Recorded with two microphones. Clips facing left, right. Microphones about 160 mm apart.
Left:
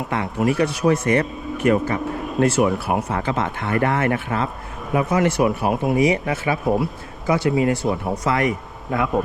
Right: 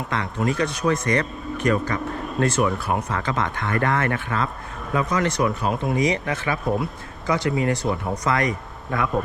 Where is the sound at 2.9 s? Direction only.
90° left.